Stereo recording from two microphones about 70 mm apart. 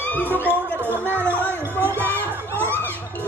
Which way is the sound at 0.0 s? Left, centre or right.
Left.